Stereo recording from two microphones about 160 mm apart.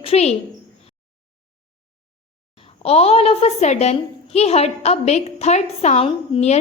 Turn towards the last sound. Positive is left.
turn(degrees=40)  # may be behind; listen again after turning